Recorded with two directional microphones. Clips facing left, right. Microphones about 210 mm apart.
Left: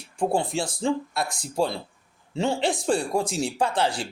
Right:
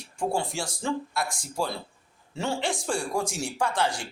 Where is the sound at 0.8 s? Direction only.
25° left (ahead or behind).